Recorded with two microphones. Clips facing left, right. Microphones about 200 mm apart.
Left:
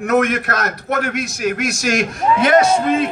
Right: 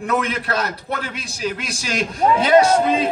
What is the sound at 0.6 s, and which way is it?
A man's voice, 55° left (ahead or behind).